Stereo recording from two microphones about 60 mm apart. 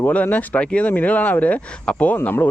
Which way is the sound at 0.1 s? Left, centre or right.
Left.